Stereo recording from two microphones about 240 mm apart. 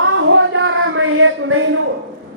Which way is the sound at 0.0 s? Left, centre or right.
Right.